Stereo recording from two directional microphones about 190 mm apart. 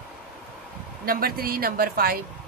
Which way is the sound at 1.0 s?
50° right (ahead or behind).